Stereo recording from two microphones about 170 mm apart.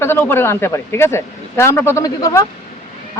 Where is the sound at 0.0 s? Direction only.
15° left (ahead or behind).